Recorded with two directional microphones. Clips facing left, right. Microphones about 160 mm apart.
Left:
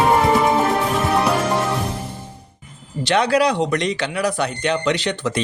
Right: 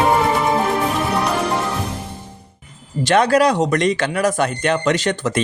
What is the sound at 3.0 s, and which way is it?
Speech, 45° right (ahead or behind).